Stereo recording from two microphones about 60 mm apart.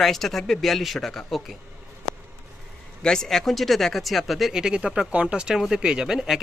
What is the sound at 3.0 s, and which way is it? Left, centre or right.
A man's voice, centre.